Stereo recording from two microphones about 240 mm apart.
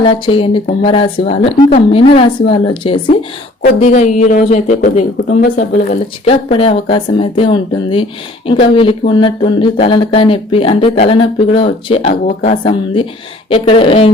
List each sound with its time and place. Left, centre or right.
0.0 s speech: left
6.2 s speech: left